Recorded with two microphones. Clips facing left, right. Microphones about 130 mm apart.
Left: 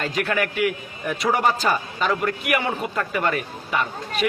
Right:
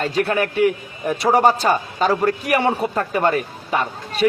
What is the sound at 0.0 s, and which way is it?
A man's voice, 35° right (ahead or behind).